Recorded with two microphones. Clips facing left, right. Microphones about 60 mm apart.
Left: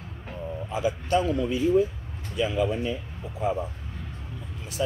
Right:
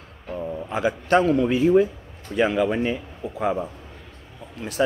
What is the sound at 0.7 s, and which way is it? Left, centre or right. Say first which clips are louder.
A man's voice: right 4 dB; right.